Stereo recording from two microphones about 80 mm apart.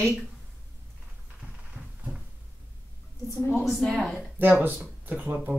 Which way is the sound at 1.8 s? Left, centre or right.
Centre.